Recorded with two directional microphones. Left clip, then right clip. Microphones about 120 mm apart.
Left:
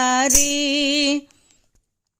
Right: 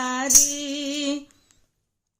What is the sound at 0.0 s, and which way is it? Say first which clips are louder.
Music: left 3 dB; 55° left (ahead or behind).